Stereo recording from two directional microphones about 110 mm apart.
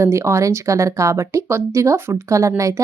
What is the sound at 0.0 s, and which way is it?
Speech, 25° right (ahead or behind).